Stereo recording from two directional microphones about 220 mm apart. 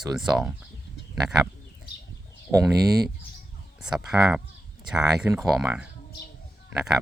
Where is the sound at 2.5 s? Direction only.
5° right (ahead or behind).